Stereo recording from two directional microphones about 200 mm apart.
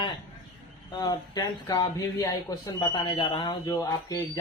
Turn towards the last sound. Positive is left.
turn(degrees=15)  # may be behind; listen again after turning